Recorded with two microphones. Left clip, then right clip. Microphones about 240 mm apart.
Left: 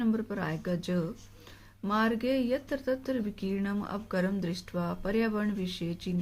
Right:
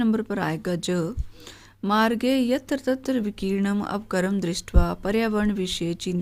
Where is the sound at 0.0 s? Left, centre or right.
Right.